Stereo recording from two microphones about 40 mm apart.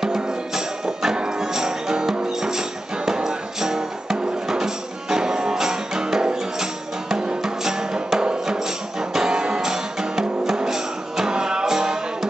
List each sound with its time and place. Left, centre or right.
0.0 s music: centre